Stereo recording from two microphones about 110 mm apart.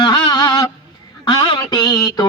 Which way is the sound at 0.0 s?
40° left (ahead or behind).